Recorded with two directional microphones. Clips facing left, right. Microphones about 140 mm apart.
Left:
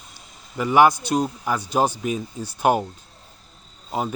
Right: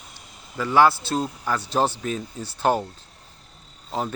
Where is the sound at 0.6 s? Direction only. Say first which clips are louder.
Left 2 dB; 15° left (ahead or behind).